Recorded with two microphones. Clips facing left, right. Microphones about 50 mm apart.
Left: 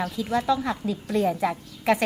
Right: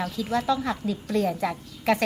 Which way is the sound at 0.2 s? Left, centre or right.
Centre.